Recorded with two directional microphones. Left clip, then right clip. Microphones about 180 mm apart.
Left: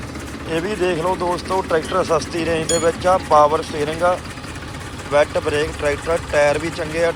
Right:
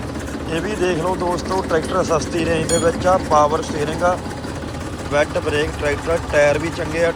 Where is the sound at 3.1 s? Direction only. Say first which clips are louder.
Left 3 dB; centre (ahead or behind).